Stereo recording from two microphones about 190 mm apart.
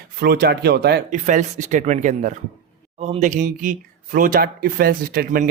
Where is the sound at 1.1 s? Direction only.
40° right (ahead or behind).